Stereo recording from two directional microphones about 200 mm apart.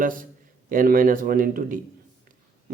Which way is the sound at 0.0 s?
45° right (ahead or behind).